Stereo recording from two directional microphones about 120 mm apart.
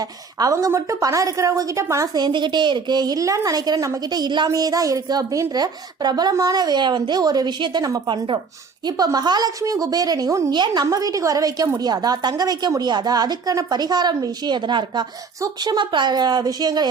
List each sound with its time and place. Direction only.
0.3 s a woman's voice: 30° right (ahead or behind)
2.1 s a woman's voice: 40° right (ahead or behind)